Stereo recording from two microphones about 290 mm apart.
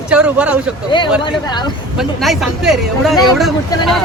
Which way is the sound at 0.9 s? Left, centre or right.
Centre.